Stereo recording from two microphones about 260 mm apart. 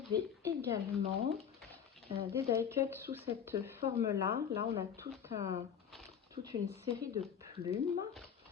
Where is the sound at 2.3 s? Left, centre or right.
Centre.